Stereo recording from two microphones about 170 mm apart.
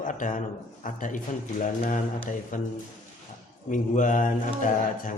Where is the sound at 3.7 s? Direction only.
50° left (ahead or behind).